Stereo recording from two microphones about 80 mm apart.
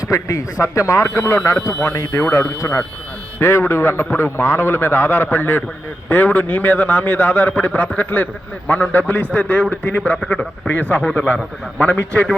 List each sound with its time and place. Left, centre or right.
0.0 s a man's voice: left; by 12.3 s centre